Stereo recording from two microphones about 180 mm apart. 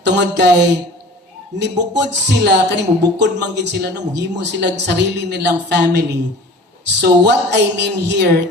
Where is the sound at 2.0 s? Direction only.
70° right (ahead or behind).